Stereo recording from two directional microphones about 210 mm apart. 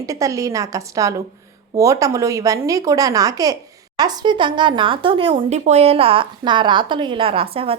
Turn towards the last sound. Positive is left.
turn(degrees=-25)  # may be behind; listen again after turning